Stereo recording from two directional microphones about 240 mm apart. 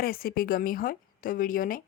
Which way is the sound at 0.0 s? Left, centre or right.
Left.